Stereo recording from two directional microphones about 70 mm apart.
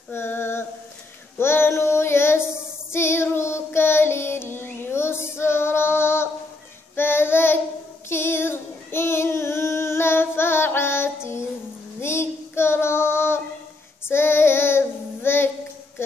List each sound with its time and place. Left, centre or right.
0.1 s female singing: left
1.4 s child singing: left